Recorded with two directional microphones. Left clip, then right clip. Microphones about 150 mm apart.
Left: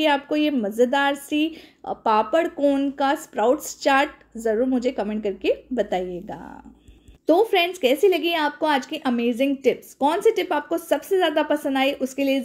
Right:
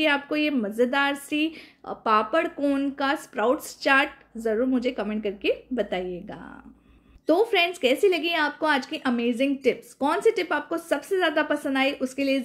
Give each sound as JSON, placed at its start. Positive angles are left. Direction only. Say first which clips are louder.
{"t": 0.0, "sound": "a woman's voice", "louder": "left 3 dB", "side_deg": 30}